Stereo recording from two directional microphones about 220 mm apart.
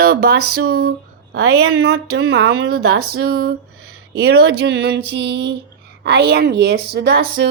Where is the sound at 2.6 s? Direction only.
80° right.